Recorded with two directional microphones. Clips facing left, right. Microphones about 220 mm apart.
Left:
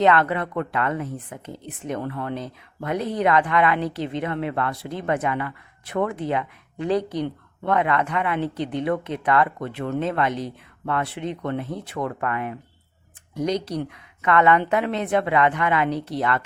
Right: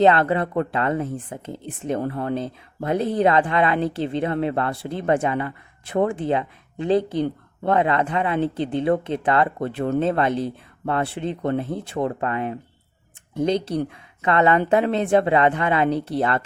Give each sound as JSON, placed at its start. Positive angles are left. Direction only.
{"t": 0.0, "sound": "a woman's voice", "side_deg": -30}